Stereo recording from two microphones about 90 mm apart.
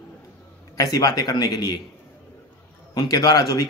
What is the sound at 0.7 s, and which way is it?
A man's voice, 45° left (ahead or behind).